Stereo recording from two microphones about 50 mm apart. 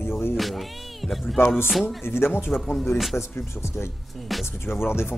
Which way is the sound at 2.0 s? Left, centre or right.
Left.